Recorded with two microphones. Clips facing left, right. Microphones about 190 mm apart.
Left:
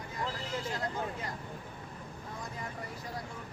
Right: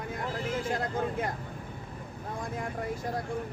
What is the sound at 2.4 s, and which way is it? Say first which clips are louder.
Speech: right 9 dB; 50° right (ahead or behind).